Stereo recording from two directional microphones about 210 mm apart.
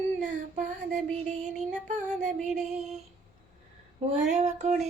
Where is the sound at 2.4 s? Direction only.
Centre (ahead or behind).